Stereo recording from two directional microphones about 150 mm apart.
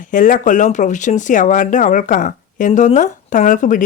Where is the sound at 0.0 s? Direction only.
60° left (ahead or behind).